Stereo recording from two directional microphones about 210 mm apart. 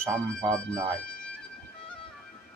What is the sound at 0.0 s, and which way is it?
Speech, 15° right (ahead or behind).